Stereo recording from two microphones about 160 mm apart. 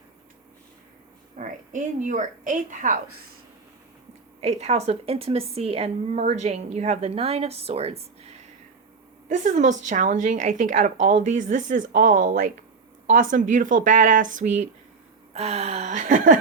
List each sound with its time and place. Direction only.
1.4 s a woman's voice: 50° right (ahead or behind)
4.4 s a woman's voice: 40° right (ahead or behind)
9.3 s a woman's voice: 50° right (ahead or behind)